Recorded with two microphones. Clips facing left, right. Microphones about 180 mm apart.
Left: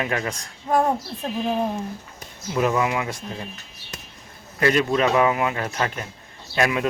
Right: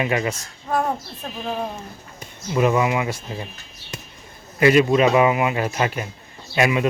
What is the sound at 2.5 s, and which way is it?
Speech, 5° right (ahead or behind).